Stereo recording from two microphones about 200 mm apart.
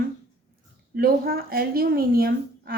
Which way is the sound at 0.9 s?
50° right (ahead or behind).